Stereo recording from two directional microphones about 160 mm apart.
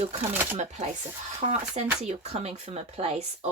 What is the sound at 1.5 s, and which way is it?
Speech, 45° right (ahead or behind).